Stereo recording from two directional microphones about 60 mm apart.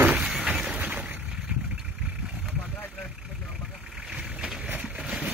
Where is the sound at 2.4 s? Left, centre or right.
Centre.